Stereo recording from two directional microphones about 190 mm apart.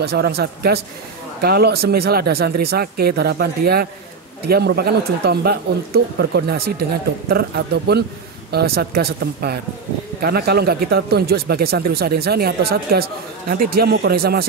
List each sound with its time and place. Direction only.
0.0 s speech: 55° right (ahead or behind)